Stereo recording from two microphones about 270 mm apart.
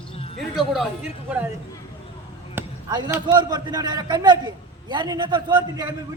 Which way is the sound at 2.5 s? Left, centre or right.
Centre.